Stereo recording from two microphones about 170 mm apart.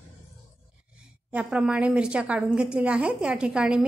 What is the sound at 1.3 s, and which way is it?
A woman's voice, 5° right (ahead or behind).